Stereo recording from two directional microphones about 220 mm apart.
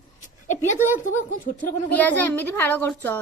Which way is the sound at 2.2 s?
10° left (ahead or behind).